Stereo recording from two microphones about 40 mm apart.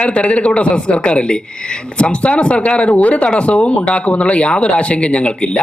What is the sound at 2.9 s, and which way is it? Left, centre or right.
Speech, left.